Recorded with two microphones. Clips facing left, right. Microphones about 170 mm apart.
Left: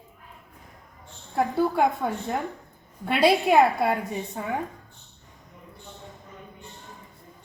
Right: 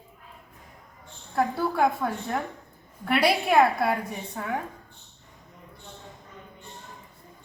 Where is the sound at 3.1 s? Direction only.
20° left (ahead or behind).